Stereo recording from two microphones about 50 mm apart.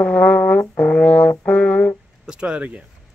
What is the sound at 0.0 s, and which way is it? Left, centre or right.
Brass instrument, left.